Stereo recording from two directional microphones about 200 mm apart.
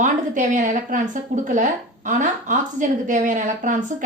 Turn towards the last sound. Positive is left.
turn(degrees=-40)  # may be behind; listen again after turning